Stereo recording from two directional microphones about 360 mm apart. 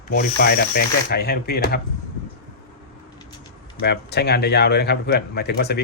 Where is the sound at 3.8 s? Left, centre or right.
Left.